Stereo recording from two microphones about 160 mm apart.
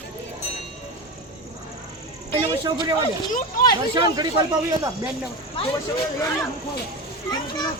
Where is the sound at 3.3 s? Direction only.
60° left (ahead or behind).